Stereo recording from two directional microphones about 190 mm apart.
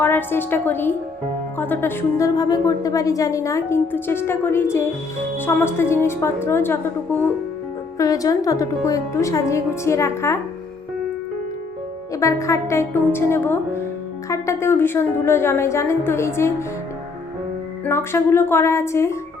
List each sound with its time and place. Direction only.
0.0 s speech: 10° left (ahead or behind)
12.1 s speech: 15° left (ahead or behind)
17.8 s speech: 10° left (ahead or behind)